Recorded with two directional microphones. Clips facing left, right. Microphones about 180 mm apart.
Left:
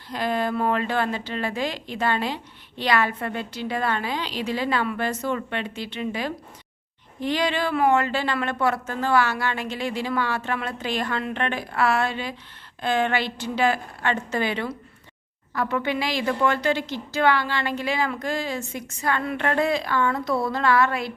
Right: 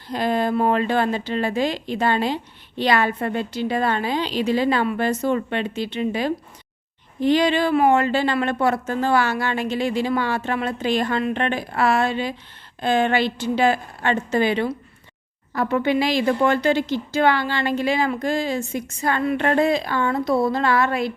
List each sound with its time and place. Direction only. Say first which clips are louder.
0.1 s speech: right 4 dB; 25° right (ahead or behind)